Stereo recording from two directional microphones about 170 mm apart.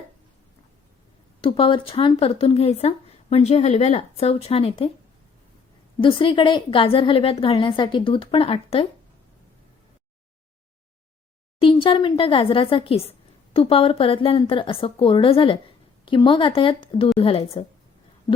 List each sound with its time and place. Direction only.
1.4 s speech: 30° left (ahead or behind)
6.0 s speech: 30° left (ahead or behind)
11.6 s speech: 30° left (ahead or behind)
18.3 s a sound: 25° left (ahead or behind)